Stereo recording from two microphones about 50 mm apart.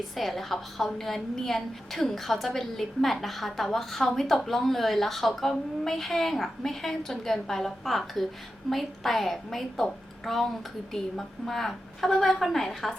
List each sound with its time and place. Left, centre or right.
0.2 s a woman's voice: centre